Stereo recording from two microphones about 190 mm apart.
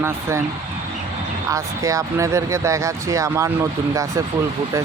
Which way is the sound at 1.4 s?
15° right (ahead or behind).